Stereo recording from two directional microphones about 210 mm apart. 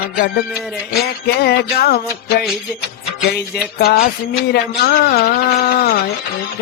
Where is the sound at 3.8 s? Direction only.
45° left (ahead or behind).